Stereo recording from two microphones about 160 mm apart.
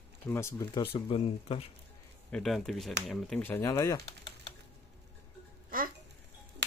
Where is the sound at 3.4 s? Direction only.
15° left (ahead or behind).